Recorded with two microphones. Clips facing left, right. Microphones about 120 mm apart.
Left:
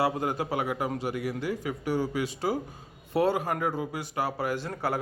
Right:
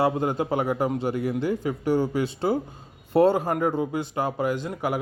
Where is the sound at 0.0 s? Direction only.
25° right (ahead or behind).